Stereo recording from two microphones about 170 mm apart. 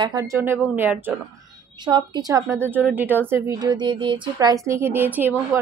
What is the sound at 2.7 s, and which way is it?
Speech, 10° right (ahead or behind).